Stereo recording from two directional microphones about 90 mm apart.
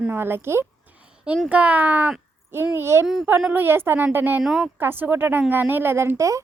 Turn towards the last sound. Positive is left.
turn(degrees=-35)  # may be behind; listen again after turning